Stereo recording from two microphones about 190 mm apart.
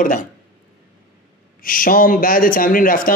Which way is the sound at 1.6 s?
45° left (ahead or behind).